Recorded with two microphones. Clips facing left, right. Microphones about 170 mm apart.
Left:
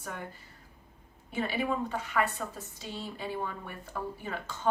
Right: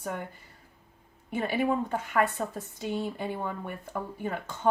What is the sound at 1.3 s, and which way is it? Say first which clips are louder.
A woman's voice: right 4 dB; 50° right (ahead or behind).